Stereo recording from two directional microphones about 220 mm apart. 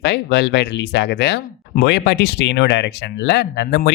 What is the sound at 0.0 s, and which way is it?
Speech, 50° left (ahead or behind).